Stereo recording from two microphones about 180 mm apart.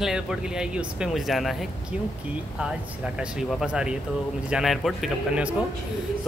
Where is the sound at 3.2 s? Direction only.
5° right (ahead or behind).